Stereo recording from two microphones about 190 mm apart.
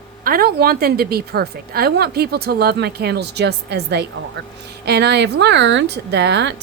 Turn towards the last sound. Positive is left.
turn(degrees=-65)  # may be behind; listen again after turning